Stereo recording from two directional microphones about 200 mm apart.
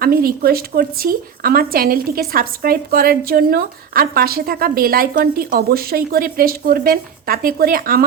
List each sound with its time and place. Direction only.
0.0 s speech: 50° right (ahead or behind)